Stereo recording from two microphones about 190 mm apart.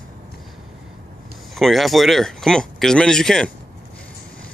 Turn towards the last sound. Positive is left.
turn(degrees=5)  # may be behind; listen again after turning